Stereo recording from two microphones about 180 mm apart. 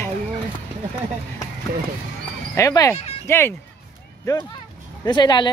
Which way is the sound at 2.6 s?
15° left (ahead or behind).